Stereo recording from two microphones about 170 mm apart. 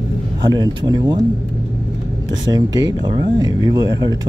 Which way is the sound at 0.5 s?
25° right (ahead or behind).